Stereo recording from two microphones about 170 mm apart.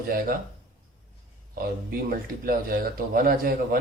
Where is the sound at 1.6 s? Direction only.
60° right (ahead or behind).